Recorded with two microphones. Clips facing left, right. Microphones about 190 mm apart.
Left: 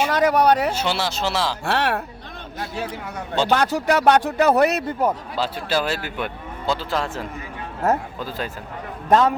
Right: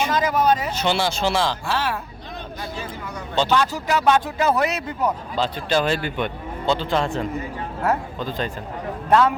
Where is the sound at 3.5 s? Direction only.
55° left (ahead or behind).